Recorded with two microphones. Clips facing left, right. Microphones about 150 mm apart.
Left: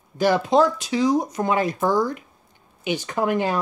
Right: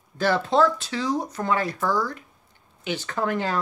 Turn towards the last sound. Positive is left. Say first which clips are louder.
# left 4 dB
turn(degrees=15)  # may be behind; listen again after turning